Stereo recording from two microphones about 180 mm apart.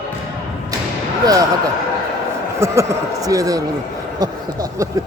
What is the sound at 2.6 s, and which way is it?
A man's voice, 15° right (ahead or behind).